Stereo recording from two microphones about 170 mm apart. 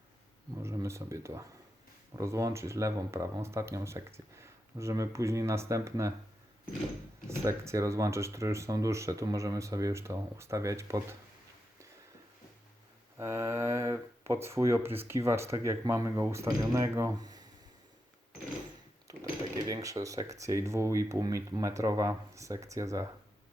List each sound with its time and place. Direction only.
0.6 s speech: 15° right (ahead or behind)
7.3 s speech: 15° right (ahead or behind)
13.1 s speech: 20° right (ahead or behind)
19.1 s a sound: 20° right (ahead or behind)
19.6 s speech: 20° right (ahead or behind)